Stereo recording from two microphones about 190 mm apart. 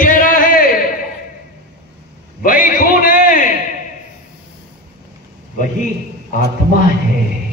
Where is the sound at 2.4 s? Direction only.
45° left (ahead or behind).